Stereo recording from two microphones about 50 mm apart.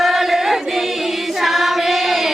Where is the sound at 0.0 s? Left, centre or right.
Centre.